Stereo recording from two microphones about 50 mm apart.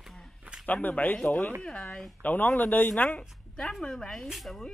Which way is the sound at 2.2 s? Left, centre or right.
Left.